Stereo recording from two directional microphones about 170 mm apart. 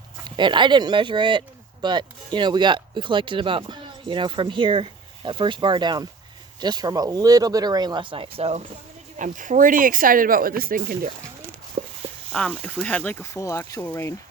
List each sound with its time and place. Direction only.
0.3 s speech: 25° right (ahead or behind)
9.1 s speech: 50° right (ahead or behind)
11.8 s a sound: 40° right (ahead or behind)
12.3 s speech: 5° left (ahead or behind)